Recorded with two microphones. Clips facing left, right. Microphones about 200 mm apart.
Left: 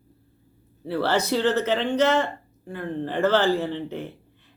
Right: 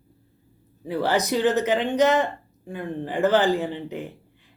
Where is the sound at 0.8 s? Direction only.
15° right (ahead or behind).